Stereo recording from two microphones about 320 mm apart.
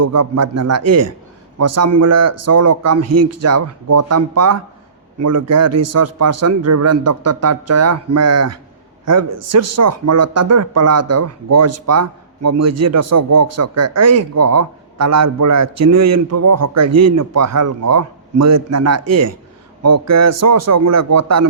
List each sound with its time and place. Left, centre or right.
0.0 s speech: right